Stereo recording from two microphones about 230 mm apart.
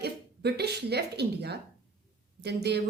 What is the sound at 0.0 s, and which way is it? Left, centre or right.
A woman's voice, right.